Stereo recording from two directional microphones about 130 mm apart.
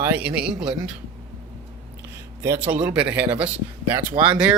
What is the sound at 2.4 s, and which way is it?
A man's voice, 20° right (ahead or behind).